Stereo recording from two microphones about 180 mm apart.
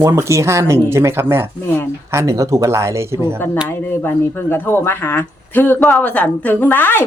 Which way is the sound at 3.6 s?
10° left (ahead or behind).